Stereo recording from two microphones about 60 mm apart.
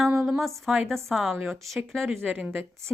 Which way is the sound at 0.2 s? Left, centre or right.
Centre.